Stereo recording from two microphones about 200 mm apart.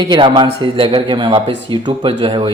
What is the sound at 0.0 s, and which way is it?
Speech, 25° right (ahead or behind).